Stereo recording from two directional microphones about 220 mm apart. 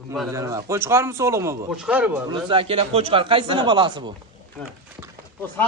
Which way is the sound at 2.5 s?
25° right (ahead or behind).